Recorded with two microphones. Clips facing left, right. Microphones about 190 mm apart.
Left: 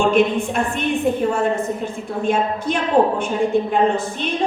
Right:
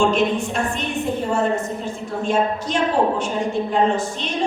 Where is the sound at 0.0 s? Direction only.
55° left (ahead or behind).